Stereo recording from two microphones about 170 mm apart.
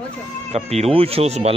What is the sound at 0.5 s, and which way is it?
Speech, 40° right (ahead or behind).